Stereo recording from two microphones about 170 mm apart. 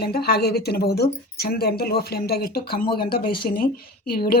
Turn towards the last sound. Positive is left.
turn(degrees=65)  # may be behind; listen again after turning